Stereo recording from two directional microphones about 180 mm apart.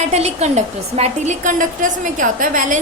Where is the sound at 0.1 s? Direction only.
40° right (ahead or behind).